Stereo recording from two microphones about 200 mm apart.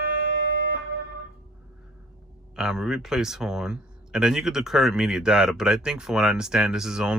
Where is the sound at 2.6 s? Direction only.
Centre (ahead or behind).